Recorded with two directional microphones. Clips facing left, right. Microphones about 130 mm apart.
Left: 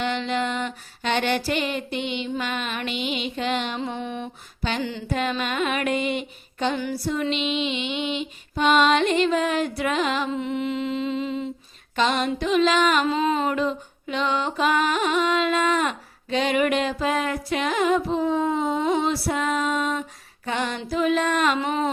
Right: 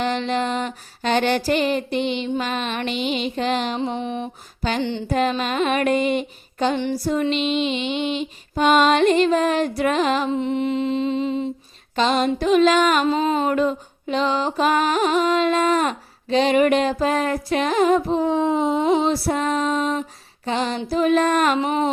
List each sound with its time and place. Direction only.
0.0 s music: 40° right (ahead or behind)
3.8 s music: 20° right (ahead or behind)
5.0 s music: 40° right (ahead or behind)
10.2 s music: 25° right (ahead or behind)
20.9 s female singing: 45° right (ahead or behind)